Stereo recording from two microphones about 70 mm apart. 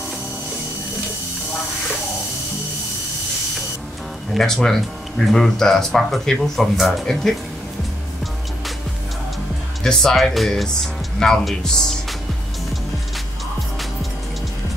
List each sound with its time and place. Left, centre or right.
4.3 s speech: centre
9.8 s speech: centre